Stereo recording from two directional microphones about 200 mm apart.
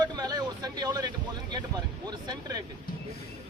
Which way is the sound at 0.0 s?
20° right (ahead or behind).